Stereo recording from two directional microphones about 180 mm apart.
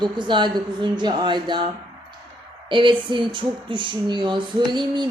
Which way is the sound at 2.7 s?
25° right (ahead or behind).